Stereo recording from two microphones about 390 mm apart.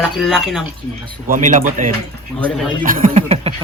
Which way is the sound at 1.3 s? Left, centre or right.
Centre.